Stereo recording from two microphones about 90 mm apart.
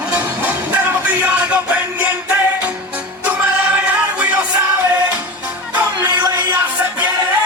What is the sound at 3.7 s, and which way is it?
Music, 15° right (ahead or behind).